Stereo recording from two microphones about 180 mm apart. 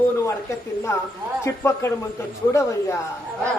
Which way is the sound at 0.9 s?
15° left (ahead or behind).